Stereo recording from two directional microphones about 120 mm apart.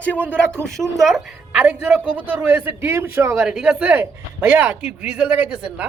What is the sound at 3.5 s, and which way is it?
A woman's voice, 10° right (ahead or behind).